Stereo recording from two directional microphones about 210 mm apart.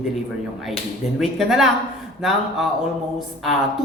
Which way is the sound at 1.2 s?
Centre (ahead or behind).